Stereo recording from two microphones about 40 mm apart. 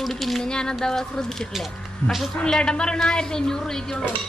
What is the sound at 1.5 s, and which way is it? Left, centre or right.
Speech, centre.